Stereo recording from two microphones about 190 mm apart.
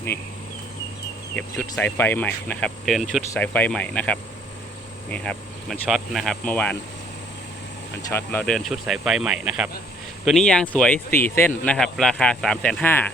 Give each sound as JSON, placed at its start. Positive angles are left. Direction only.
{"t": 0.1, "sound": "speech", "side_deg": 15}
{"t": 1.4, "sound": "speech", "side_deg": 10}
{"t": 8.1, "sound": "speech", "side_deg": 10}